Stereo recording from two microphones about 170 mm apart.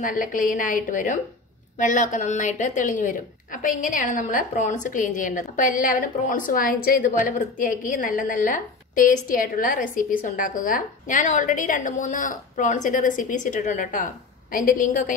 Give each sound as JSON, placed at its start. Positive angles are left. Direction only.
{"t": 0.0, "sound": "a woman's voice", "side_deg": 55}